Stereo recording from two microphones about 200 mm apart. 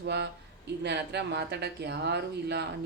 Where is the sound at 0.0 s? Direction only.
55° right (ahead or behind).